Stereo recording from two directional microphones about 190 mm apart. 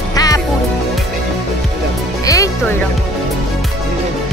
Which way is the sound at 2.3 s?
15° left (ahead or behind).